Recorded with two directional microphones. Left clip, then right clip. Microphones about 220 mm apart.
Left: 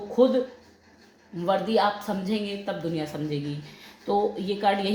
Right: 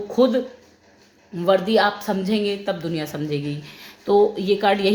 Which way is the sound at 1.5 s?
40° right (ahead or behind).